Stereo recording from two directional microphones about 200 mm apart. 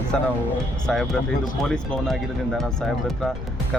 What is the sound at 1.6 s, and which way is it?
Speech, 5° left (ahead or behind).